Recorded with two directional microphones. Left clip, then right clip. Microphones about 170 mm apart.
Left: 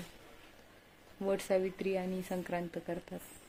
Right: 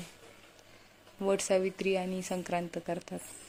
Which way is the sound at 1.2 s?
10° right (ahead or behind).